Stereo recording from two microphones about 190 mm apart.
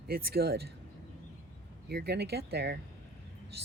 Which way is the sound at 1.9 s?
60° right (ahead or behind).